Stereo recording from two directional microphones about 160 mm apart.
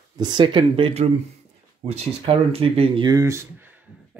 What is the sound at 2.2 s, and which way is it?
Speech, 35° right (ahead or behind).